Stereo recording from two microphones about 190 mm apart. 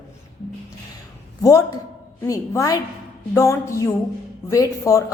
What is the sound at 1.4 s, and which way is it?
A man's voice, 15° left (ahead or behind).